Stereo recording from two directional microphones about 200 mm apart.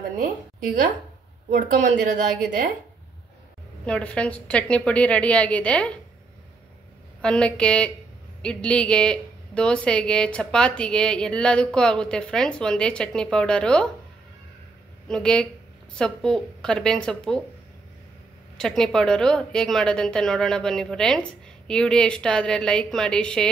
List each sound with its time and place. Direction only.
0.2 s a woman's voice: 40° right (ahead or behind)
3.8 s a woman's voice: 5° left (ahead or behind)
7.2 s a woman's voice: 5° left (ahead or behind)
15.0 s a woman's voice: 5° left (ahead or behind)
18.6 s a woman's voice: centre (ahead or behind)